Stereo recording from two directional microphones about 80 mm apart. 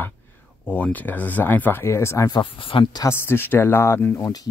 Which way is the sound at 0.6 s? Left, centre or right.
Left.